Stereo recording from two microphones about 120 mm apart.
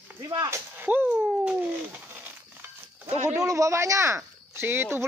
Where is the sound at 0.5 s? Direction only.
15° right (ahead or behind).